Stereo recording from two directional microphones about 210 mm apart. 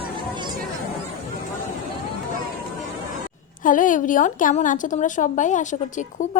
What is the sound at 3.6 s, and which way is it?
A woman's voice, 40° left (ahead or behind).